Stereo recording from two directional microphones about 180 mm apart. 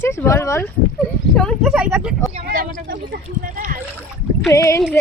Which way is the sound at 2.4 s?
55° right (ahead or behind).